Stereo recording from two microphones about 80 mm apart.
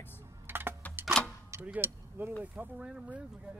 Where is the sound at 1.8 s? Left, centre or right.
Right.